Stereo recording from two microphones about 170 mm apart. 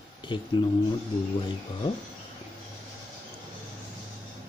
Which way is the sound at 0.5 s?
30° left (ahead or behind).